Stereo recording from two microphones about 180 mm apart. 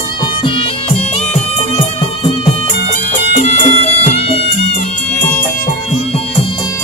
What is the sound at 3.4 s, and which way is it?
Music, 40° left (ahead or behind).